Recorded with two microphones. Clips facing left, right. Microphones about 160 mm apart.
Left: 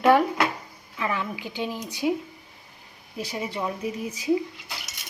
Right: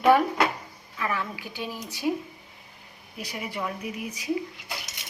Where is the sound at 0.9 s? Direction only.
15° left (ahead or behind).